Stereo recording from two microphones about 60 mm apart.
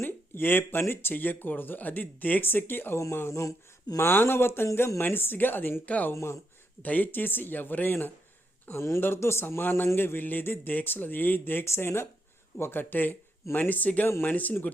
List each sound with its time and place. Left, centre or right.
0.0 s speech: left
2.9 s speech: left
4.0 s speech: left
6.1 s speech: left
6.8 s speech: left
8.8 s speech: left
11.6 s speech: left